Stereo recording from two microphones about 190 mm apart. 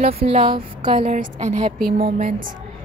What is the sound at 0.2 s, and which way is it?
A woman's voice, 30° right (ahead or behind).